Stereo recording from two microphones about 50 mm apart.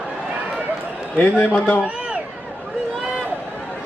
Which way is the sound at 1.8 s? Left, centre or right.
Right.